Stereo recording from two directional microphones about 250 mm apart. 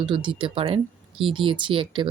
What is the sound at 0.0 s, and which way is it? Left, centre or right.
Speech, centre.